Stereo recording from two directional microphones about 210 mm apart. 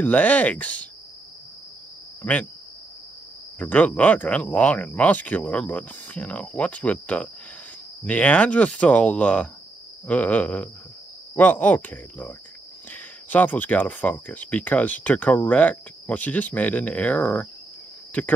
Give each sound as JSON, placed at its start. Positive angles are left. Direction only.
{"t": 0.0, "sound": "speech", "side_deg": 5}
{"t": 3.5, "sound": "speech", "side_deg": 5}